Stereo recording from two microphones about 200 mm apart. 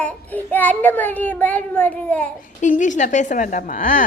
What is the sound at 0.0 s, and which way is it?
A child's voice, 5° left (ahead or behind).